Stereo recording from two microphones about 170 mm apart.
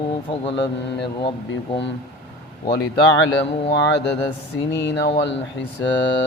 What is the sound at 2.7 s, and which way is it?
Speech, 75° left (ahead or behind).